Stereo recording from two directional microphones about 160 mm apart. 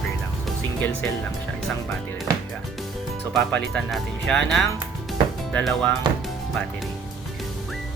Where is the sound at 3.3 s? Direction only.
5° left (ahead or behind).